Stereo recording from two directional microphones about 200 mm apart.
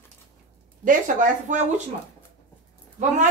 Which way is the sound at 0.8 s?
40° right (ahead or behind).